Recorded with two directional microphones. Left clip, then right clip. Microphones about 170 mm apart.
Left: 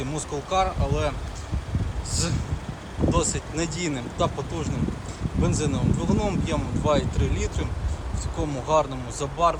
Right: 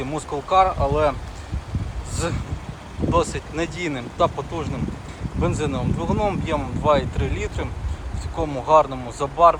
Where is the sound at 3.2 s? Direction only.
15° left (ahead or behind).